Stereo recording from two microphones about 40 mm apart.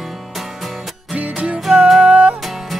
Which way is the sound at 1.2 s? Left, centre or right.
Right.